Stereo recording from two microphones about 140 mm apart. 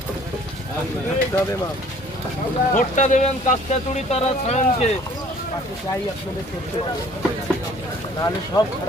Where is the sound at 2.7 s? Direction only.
60° left (ahead or behind).